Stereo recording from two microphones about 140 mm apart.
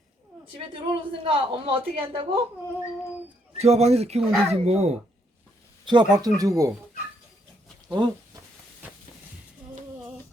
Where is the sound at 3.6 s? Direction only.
50° right (ahead or behind).